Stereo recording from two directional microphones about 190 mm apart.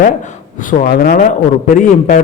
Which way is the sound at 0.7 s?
55° left (ahead or behind).